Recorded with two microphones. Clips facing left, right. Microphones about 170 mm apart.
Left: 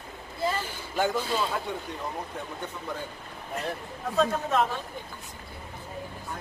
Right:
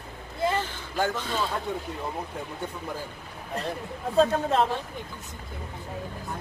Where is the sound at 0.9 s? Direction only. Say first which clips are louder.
Left 1 dB; 10° left (ahead or behind).